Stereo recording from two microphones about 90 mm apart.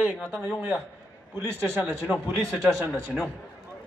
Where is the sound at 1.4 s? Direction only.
25° right (ahead or behind).